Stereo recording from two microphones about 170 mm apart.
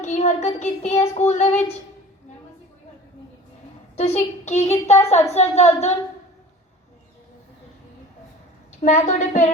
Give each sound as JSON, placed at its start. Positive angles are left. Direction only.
{"t": 0.0, "sound": "child singing", "side_deg": 45}
{"t": 0.6, "sound": "a woman's voice", "side_deg": 40}
{"t": 3.9, "sound": "a woman's voice", "side_deg": 40}
{"t": 8.8, "sound": "a woman's voice", "side_deg": 45}